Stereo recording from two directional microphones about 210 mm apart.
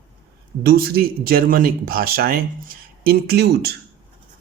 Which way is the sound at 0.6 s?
50° right (ahead or behind).